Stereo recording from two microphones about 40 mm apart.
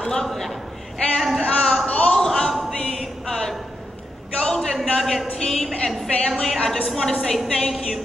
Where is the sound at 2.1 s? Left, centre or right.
Centre.